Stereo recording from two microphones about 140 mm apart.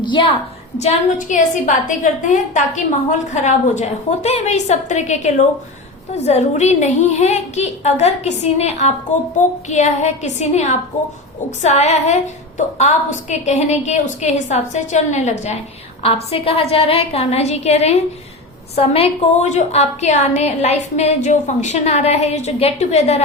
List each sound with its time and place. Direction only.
0.0 s a woman's voice: 35° left (ahead or behind)
0.8 s a woman's voice: 50° left (ahead or behind)
1.4 s a woman's voice: 70° left (ahead or behind)
16.0 s a woman's voice: 45° left (ahead or behind)